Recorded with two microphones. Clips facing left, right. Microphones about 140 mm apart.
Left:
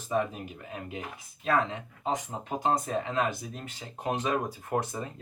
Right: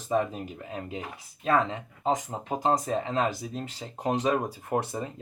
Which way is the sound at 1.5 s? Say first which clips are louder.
Right 2 dB; centre (ahead or behind).